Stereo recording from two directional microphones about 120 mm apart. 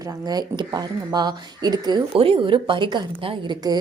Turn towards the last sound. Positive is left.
turn(degrees=-35)  # may be behind; listen again after turning